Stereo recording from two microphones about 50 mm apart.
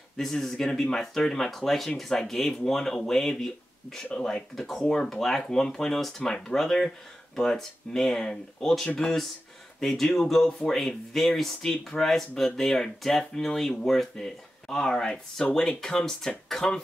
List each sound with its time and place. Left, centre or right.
0.2 s speech: centre